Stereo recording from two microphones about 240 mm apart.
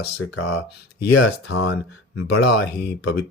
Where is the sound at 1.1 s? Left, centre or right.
Left.